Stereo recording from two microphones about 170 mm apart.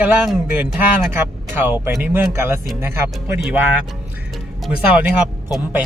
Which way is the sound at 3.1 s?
Centre (ahead or behind).